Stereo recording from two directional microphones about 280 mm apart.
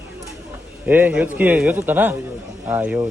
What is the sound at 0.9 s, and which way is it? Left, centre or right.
Speech, centre.